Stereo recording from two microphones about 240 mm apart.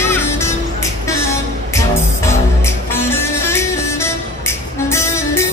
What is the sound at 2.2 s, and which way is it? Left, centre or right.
Music, centre.